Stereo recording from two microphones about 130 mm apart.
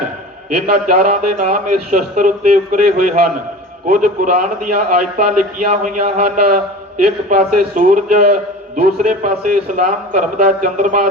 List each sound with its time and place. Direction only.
0.9 s a man's voice: 90° right